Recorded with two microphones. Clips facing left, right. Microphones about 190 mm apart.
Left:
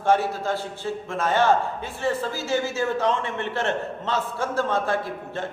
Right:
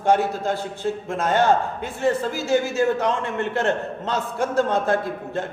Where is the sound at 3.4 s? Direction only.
45° right (ahead or behind).